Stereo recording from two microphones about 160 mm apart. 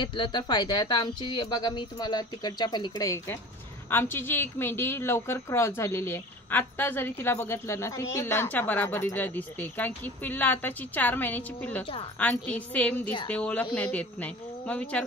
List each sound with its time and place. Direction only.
0.0 s a woman's voice: 30° left (ahead or behind); by 11.8 s 10° left (ahead or behind)
11.8 s a woman's voice: 35° left (ahead or behind)
12.2 s a woman's voice: 10° left (ahead or behind)